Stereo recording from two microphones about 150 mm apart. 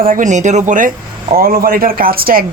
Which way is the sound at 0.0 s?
65° right (ahead or behind).